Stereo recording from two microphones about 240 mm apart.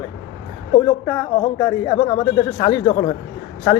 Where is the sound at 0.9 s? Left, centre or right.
Centre.